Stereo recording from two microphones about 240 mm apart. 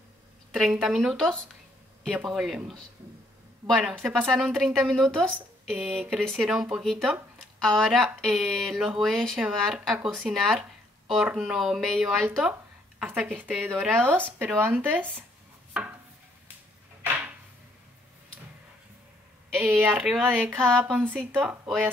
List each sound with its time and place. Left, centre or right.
0.5 s a woman's voice: centre
17.0 s a sound: centre
19.5 s a woman's voice: centre